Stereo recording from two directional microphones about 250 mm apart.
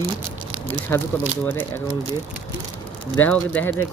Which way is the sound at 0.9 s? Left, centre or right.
Centre.